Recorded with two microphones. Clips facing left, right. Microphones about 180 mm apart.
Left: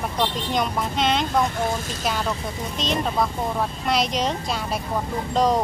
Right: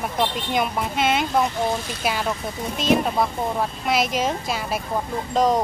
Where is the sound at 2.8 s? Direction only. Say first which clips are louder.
Right 4 dB; 5° right (ahead or behind).